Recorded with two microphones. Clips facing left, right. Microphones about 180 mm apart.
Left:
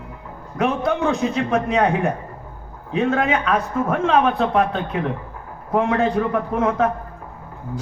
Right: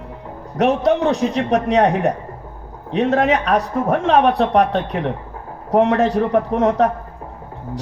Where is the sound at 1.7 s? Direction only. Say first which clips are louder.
Right 4 dB; 40° right (ahead or behind).